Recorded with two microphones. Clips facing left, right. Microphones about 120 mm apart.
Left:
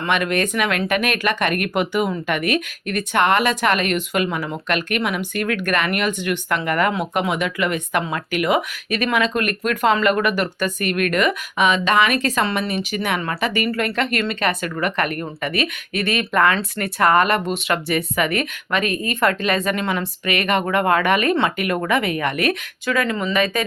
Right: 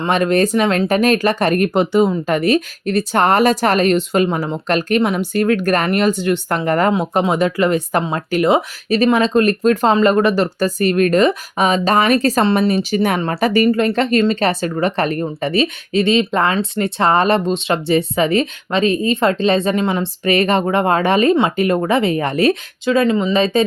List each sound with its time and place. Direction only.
0.0 s speech: 30° right (ahead or behind)
13.7 s speech: 25° right (ahead or behind)